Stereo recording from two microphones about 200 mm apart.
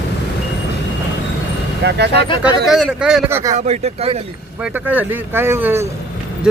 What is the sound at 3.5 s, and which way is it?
Speech, 30° right (ahead or behind).